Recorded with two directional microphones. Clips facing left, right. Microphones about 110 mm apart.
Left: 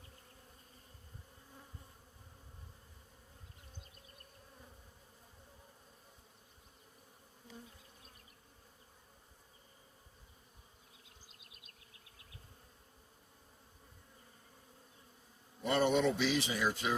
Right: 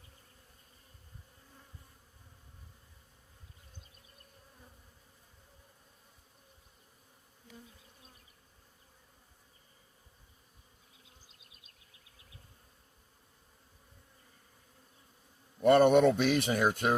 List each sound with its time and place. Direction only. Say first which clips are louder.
15.6 s speech: right 9 dB; 55° right (ahead or behind)